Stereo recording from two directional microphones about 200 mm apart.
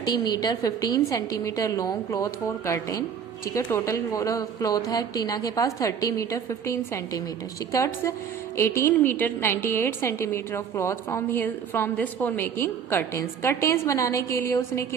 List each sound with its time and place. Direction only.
0.0 s a woman's voice: 20° left (ahead or behind)